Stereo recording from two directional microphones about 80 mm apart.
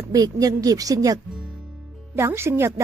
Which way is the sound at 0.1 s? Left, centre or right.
Right.